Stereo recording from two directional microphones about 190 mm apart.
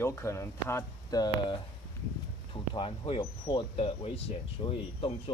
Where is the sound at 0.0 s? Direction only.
15° left (ahead or behind).